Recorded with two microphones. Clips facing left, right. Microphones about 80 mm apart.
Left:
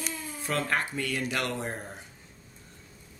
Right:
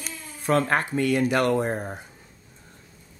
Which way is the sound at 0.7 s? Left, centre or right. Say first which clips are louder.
Right 7 dB; right.